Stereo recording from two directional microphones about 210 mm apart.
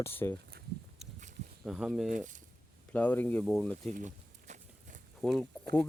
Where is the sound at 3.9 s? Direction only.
35° right (ahead or behind).